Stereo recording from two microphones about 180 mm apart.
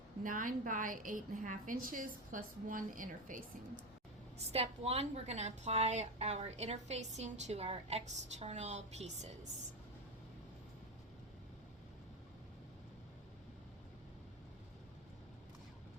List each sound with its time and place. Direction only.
0.2 s a woman's voice: 50° right (ahead or behind)
4.4 s a woman's voice: 35° right (ahead or behind)